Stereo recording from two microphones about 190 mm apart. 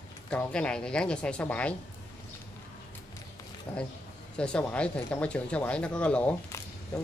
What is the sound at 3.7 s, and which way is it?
Speech, 5° left (ahead or behind).